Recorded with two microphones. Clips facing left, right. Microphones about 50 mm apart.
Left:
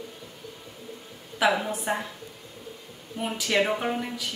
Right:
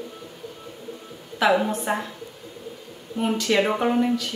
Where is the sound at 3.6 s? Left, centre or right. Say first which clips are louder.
Right 5 dB; centre.